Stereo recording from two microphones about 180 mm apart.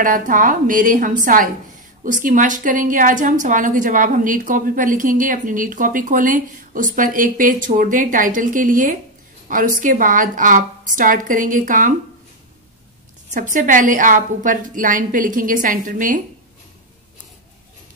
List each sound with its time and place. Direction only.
0.0 s a woman's voice: 50° right (ahead or behind)
13.3 s a woman's voice: 45° right (ahead or behind)